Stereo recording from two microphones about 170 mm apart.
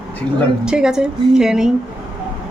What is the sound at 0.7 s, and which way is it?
Speech, 5° right (ahead or behind).